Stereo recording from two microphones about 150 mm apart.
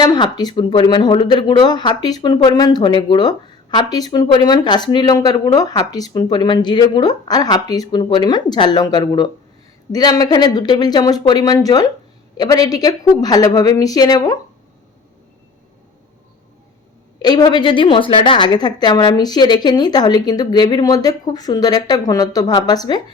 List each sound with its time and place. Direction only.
0.0 s speech: 25° left (ahead or behind)
17.2 s speech: 25° left (ahead or behind)